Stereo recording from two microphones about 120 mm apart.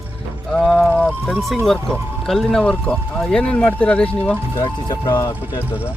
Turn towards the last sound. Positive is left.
turn(degrees=35)  # may be behind; listen again after turning